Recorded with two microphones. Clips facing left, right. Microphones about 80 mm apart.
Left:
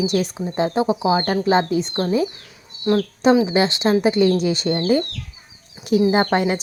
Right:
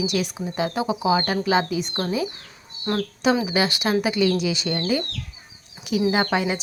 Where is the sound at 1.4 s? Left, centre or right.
Left.